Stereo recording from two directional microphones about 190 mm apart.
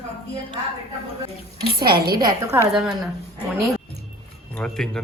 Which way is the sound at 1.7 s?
55° right (ahead or behind).